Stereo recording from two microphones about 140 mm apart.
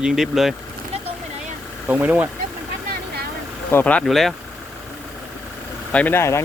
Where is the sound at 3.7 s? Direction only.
15° left (ahead or behind).